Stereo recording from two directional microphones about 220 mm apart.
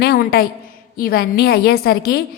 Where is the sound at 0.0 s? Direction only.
45° left (ahead or behind).